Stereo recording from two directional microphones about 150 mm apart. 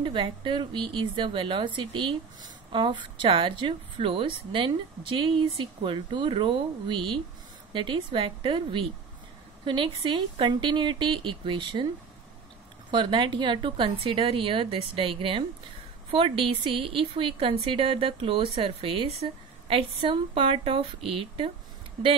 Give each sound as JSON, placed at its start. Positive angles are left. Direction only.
{"t": 0.0, "sound": "a woman's voice", "side_deg": -35}
{"t": 12.9, "sound": "a woman's voice", "side_deg": -35}